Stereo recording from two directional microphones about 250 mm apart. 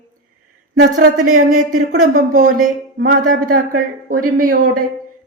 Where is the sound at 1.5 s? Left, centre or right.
Right.